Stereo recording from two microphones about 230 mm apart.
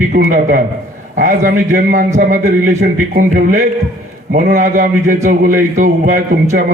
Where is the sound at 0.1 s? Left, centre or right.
Right.